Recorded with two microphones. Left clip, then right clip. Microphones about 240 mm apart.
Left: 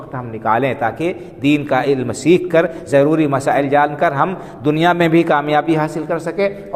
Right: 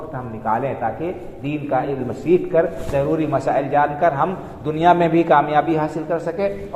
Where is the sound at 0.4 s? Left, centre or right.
Left.